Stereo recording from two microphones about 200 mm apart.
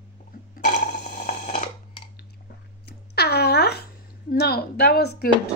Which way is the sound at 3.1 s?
55° left (ahead or behind).